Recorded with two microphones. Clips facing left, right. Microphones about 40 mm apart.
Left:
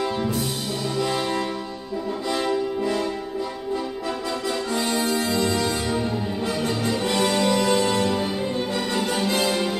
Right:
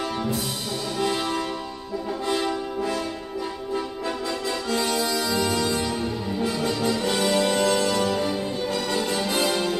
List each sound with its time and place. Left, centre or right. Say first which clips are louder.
4.7 s accordion: left 1 dB; left
5.5 s music: left 1 dB; left